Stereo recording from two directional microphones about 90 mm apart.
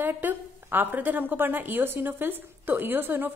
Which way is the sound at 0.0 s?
20° right (ahead or behind).